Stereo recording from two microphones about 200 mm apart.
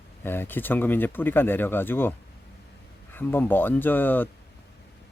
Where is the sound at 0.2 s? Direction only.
10° left (ahead or behind).